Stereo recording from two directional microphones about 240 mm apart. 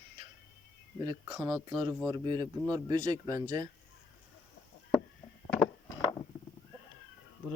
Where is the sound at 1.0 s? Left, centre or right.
Centre.